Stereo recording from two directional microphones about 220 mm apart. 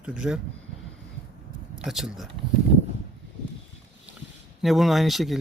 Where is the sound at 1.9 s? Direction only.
Centre (ahead or behind).